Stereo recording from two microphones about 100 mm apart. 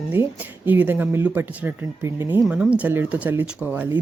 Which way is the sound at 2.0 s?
30° right (ahead or behind).